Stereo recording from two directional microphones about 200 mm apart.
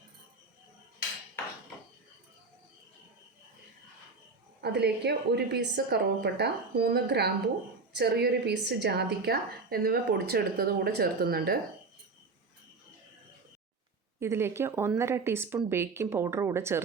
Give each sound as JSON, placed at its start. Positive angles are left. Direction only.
{"t": 4.6, "sound": "a woman's voice", "side_deg": -55}
{"t": 14.2, "sound": "speech", "side_deg": -10}